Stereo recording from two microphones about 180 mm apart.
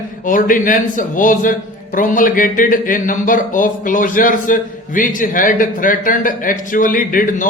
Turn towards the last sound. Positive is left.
turn(degrees=50)  # may be behind; listen again after turning